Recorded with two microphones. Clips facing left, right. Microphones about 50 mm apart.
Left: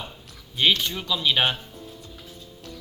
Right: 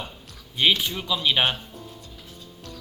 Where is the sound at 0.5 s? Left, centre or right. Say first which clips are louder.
Even; centre.